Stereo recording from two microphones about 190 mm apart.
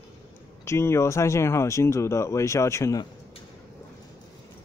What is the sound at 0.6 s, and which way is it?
Speech, 15° left (ahead or behind).